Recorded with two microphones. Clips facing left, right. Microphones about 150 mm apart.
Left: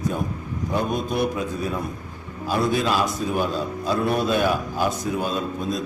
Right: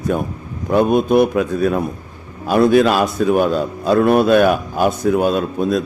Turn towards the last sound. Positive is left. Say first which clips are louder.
# right 8 dB
turn(degrees=-65)  # may be behind; listen again after turning